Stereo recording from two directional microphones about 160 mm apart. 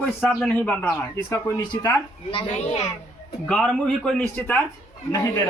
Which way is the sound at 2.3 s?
45° left (ahead or behind).